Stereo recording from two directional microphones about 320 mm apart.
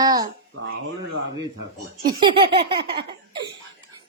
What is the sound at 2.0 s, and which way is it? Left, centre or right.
A woman's voice, centre.